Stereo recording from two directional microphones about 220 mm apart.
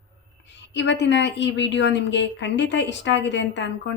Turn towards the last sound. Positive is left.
turn(degrees=55)  # may be behind; listen again after turning